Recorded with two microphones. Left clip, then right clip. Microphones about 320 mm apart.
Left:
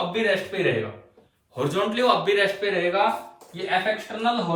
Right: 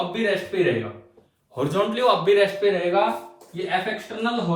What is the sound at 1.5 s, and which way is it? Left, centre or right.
Speech, centre.